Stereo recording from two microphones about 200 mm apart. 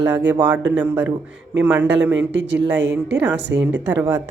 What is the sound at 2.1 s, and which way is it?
Speech, 60° right (ahead or behind).